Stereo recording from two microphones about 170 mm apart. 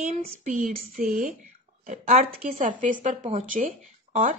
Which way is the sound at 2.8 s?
50° right (ahead or behind).